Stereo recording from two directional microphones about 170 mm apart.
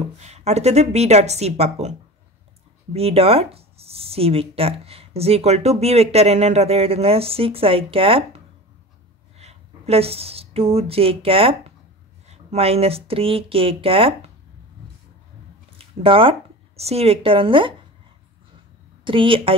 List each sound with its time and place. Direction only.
0.2 s speech: 40° right (ahead or behind)
9.4 s speech: 40° right (ahead or behind)
15.8 s speech: 30° right (ahead or behind)
19.0 s speech: 30° right (ahead or behind)